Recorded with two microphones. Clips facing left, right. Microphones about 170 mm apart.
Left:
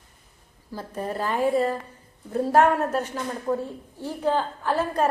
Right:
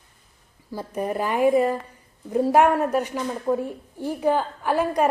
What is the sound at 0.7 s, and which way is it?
A woman's voice, 15° right (ahead or behind).